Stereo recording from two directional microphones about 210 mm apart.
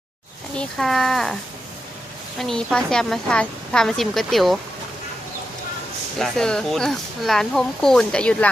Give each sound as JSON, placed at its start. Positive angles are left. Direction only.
{"t": 0.5, "sound": "speech", "side_deg": 5}
{"t": 2.4, "sound": "speech", "side_deg": 0}
{"t": 6.1, "sound": "speech", "side_deg": 0}